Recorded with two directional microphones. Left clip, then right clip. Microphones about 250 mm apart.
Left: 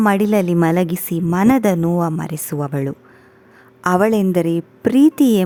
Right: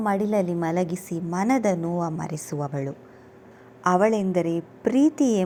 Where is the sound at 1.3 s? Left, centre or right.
Left.